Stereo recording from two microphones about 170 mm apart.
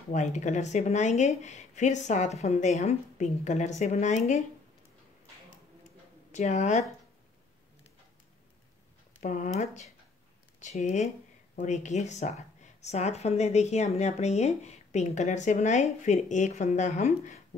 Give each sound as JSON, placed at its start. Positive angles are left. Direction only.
{"t": 0.1, "sound": "a woman's voice", "side_deg": 45}
{"t": 6.3, "sound": "a woman's voice", "side_deg": 45}
{"t": 9.2, "sound": "a woman's voice", "side_deg": 45}